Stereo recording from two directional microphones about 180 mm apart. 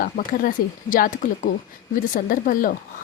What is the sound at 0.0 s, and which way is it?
Speech, 50° left (ahead or behind).